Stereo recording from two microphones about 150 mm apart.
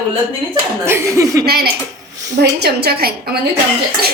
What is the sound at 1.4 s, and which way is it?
A woman's voice, 90° right.